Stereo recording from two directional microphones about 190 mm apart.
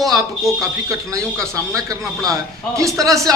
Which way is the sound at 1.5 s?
15° right (ahead or behind).